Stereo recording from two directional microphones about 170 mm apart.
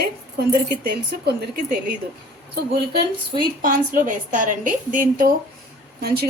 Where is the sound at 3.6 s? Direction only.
55° right (ahead or behind).